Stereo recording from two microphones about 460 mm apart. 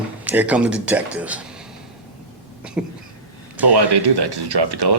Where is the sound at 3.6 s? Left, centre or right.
Right.